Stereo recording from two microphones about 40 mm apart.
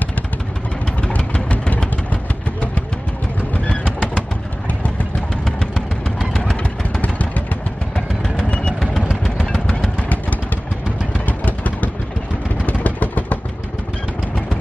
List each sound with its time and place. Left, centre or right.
1.1 s vehicle: left
3.6 s a sound: left
5.6 s vehicle: left
6.6 s vehicle: left
7.9 s vehicle: left
11.2 s vehicle: left